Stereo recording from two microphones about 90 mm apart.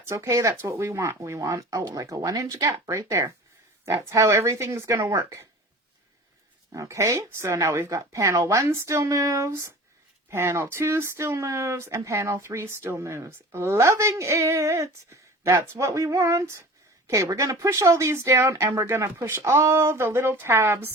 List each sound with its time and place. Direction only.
0.1 s speech: 35° right (ahead or behind)
6.7 s speech: 35° right (ahead or behind)